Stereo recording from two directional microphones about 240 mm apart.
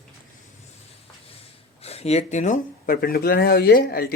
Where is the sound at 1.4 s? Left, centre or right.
Left.